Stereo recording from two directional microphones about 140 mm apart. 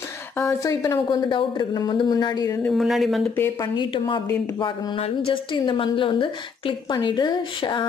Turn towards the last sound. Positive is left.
turn(degrees=35)  # may be behind; listen again after turning